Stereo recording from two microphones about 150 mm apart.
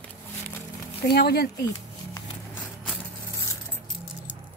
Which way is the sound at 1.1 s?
90° left.